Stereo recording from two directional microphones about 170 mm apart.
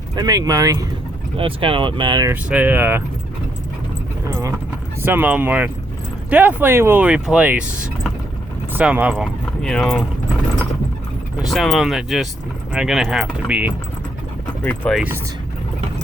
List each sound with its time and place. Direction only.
0.2 s speech: 20° right (ahead or behind)
1.4 s speech: 30° right (ahead or behind)
2.3 s speech: 10° right (ahead or behind)
5.0 s speech: 10° right (ahead or behind)
8.7 s speech: 10° right (ahead or behind)
11.4 s speech: centre (ahead or behind)
14.6 s speech: 10° left (ahead or behind)
14.9 s speech: 10° right (ahead or behind)